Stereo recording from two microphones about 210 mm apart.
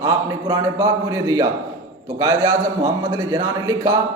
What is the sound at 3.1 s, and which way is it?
Speech, 15° right (ahead or behind).